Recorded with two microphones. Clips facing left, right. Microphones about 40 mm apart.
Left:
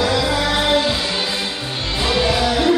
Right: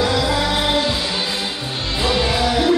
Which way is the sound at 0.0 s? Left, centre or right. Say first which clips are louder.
Even; centre.